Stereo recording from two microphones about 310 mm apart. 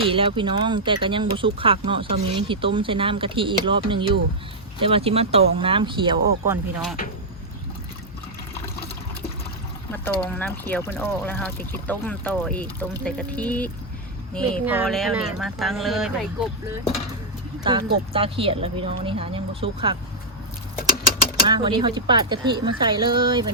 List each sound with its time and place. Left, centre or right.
0.0 s speech: centre
9.9 s speech: centre
17.6 s speech: centre
20.7 s mechanisms: left
21.4 s speech: centre